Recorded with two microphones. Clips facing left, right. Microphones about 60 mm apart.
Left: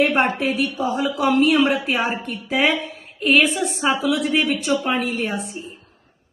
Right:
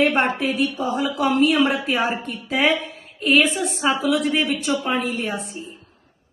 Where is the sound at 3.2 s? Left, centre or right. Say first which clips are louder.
Left 1 dB; left.